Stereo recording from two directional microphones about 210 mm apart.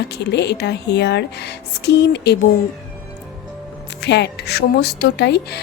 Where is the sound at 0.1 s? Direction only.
55° left (ahead or behind).